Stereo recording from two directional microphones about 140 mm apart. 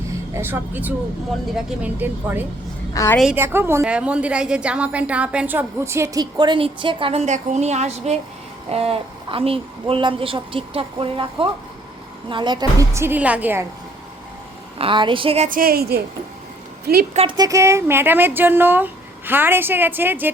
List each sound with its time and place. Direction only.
0.3 s a woman's voice: 15° right (ahead or behind)
2.9 s a woman's voice: 25° left (ahead or behind)
3.3 s a woman's voice: 15° right (ahead or behind); by 12.6 s 35° right (ahead or behind)
12.9 s a woman's voice: 15° right (ahead or behind)
14.8 s speech: 35° right (ahead or behind)
15.4 s a woman's voice: 85° right
17.3 s a woman's voice: 25° right (ahead or behind)